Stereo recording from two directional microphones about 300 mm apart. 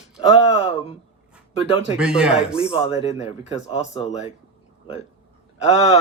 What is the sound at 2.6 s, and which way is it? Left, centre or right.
Speech, centre.